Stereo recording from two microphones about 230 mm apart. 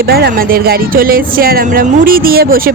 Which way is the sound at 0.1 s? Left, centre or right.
Right.